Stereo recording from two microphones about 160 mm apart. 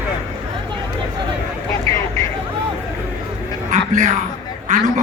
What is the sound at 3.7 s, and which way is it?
Music, 50° right (ahead or behind).